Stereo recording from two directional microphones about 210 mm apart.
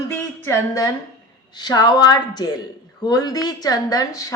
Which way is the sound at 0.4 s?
15° left (ahead or behind).